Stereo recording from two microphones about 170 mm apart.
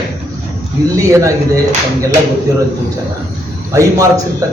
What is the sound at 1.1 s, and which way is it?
Speech, 20° right (ahead or behind).